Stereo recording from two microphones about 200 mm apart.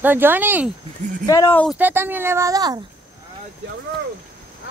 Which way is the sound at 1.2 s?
15° left (ahead or behind).